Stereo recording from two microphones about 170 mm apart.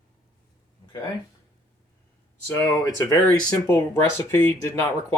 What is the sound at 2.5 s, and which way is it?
Speech, 15° left (ahead or behind).